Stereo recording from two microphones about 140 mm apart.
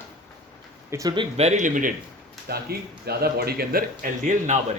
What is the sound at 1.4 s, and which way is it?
Speech, 55° right (ahead or behind).